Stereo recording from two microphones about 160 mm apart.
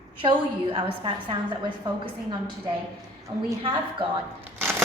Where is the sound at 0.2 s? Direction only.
30° right (ahead or behind).